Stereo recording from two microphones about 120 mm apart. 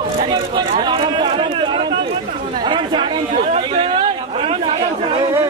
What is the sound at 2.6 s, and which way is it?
Chatter, 40° right (ahead or behind).